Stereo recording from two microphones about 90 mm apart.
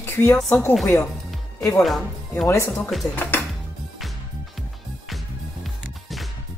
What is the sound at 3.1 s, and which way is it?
Speech, 20° left (ahead or behind).